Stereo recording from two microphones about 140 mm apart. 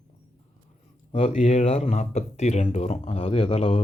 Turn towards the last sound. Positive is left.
turn(degrees=50)  # may be behind; listen again after turning